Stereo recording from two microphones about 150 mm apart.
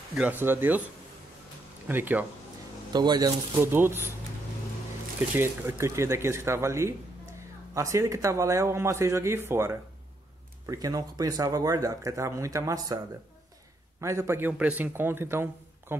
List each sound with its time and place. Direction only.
0.1 s a man's voice: 10° right (ahead or behind)
1.9 s a man's voice: 15° right (ahead or behind)
2.9 s speech: 30° right (ahead or behind)
3.5 s a man's voice: 15° right (ahead or behind)
5.4 s a man's voice: 15° right (ahead or behind)
14.0 s a man's voice: 20° right (ahead or behind)